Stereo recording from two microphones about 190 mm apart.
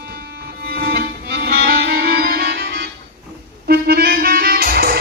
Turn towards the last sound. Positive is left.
turn(degrees=-55)  # may be behind; listen again after turning